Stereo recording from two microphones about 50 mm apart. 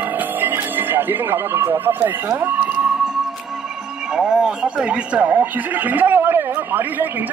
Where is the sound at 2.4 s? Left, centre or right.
Right.